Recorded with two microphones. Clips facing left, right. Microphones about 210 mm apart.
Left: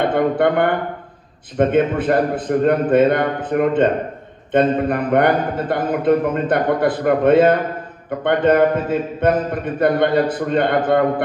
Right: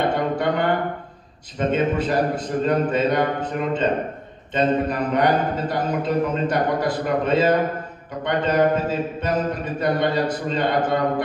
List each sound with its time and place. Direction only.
0.1 s a man's voice: 55° left (ahead or behind)